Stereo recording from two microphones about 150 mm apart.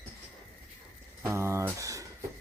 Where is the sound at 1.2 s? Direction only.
20° right (ahead or behind).